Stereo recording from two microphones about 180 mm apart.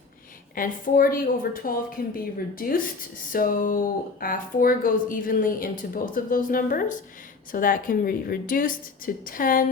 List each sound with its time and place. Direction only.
0.5 s a woman's voice: 50° left (ahead or behind)